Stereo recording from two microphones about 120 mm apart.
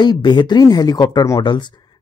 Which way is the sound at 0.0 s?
40° left (ahead or behind).